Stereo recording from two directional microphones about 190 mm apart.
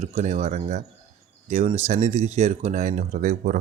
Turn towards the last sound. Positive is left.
turn(degrees=-40)  # may be behind; listen again after turning